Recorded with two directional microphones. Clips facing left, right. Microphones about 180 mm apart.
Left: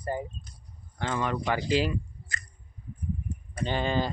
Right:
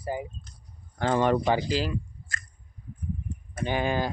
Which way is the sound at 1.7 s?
Centre (ahead or behind).